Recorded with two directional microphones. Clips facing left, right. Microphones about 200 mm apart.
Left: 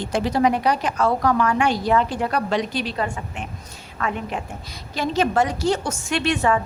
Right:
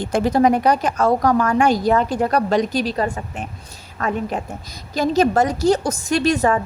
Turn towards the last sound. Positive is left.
turn(degrees=-40)  # may be behind; listen again after turning